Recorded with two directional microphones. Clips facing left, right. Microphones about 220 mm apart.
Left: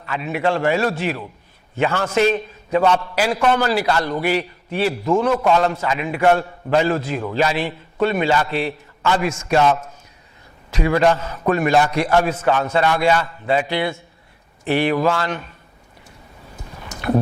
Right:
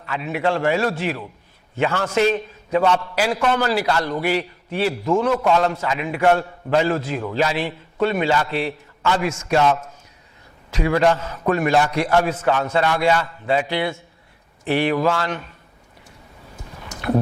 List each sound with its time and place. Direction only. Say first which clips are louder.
0.0 s a man's voice: left 1 dB; 15° left (ahead or behind)
10.7 s a man's voice: left 1 dB; 15° left (ahead or behind)
16.8 s a sound: left 1 dB; 25° left (ahead or behind)